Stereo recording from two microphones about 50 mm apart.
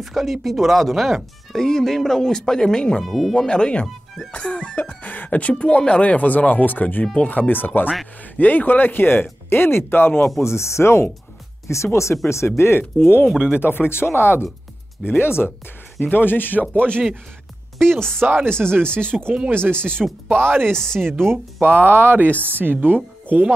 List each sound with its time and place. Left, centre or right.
0.0 s speech: centre
3.0 s speech: centre
3.3 s speech: centre; by 10.2 s left
10.4 s speech: left
11.6 s speech: left
16.7 s speech: left
17.9 s speech: centre
18.2 s speech: right
19.1 s speech: centre
19.5 s speech: right
20.6 s speech: centre
21.1 s a woman's voice: right